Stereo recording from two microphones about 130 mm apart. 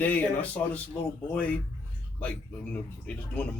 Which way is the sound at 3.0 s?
10° left (ahead or behind).